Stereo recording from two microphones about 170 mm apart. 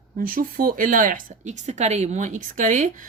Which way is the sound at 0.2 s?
55° right (ahead or behind).